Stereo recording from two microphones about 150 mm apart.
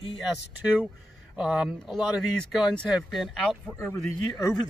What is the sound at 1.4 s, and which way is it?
Speech, 5° right (ahead or behind).